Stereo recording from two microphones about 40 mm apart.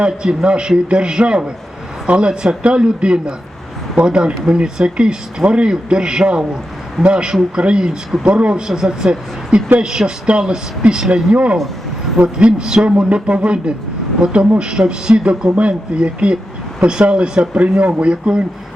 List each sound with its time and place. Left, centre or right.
0.0 s speech: right
11.5 s vehicle: centre
12.2 s speech: right